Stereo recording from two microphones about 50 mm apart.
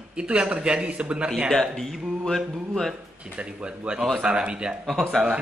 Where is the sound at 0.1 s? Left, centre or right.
Right.